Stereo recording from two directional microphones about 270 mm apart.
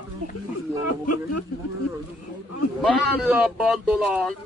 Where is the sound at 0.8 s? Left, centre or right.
Left.